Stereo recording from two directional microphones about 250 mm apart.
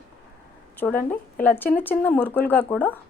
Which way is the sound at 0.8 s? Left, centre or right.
Centre.